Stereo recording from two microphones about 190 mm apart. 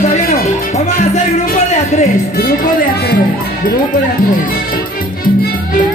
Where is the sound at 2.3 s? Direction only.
50° left (ahead or behind).